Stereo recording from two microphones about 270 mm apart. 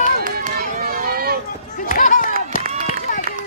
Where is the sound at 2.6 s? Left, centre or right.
Right.